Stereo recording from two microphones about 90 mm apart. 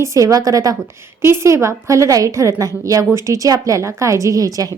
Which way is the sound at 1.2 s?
30° right (ahead or behind).